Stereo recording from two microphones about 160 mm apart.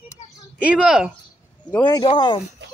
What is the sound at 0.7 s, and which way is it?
Speech, 5° right (ahead or behind).